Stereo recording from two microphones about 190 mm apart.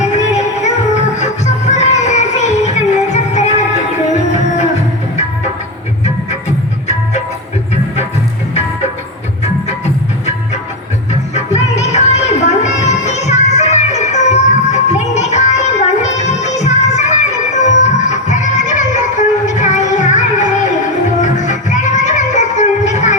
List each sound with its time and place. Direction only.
0.0 s music: 40° left (ahead or behind)
9.4 s music: 35° left (ahead or behind)
18.0 s music: 40° left (ahead or behind)